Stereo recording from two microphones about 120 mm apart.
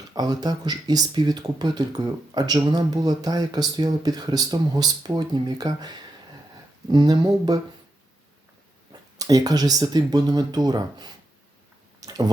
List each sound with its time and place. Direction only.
0.1 s speech: 35° right (ahead or behind)
8.9 s speech: 30° right (ahead or behind)
11.9 s squish: 30° right (ahead or behind)